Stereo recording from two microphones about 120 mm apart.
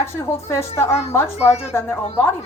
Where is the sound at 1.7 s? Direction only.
15° left (ahead or behind).